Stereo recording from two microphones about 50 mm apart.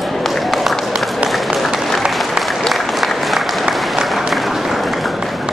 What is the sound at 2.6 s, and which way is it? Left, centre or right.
Applause, centre.